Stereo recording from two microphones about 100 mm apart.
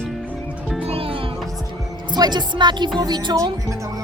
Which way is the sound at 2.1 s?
45° right (ahead or behind).